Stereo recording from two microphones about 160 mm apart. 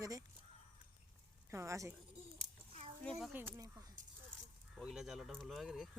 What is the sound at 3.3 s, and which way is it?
Speech, 15° right (ahead or behind).